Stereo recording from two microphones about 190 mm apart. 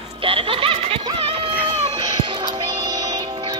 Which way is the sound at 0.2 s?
30° right (ahead or behind).